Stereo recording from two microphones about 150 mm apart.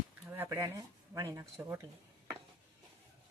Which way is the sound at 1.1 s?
20° right (ahead or behind).